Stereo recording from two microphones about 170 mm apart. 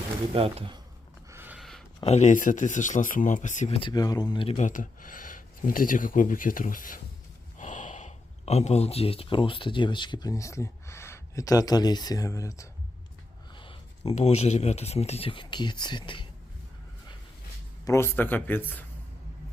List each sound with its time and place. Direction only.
0.3 s speech: 35° right (ahead or behind)
1.3 s a sound: 10° right (ahead or behind)
2.0 s speech: 45° left (ahead or behind)
3.8 s speech: 25° left (ahead or behind)
13.5 s speech: 30° left (ahead or behind)
17.8 s speech: 15° left (ahead or behind)